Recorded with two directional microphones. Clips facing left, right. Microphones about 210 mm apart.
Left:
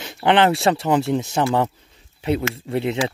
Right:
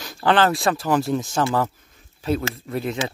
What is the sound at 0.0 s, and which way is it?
Speech, 25° left (ahead or behind).